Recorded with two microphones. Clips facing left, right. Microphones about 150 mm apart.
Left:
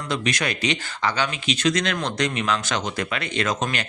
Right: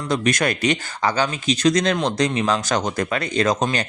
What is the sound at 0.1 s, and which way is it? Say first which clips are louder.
Speech: right 5 dB; 50° right (ahead or behind).